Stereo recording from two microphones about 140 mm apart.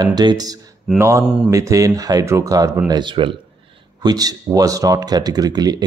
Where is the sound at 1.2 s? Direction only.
5° right (ahead or behind).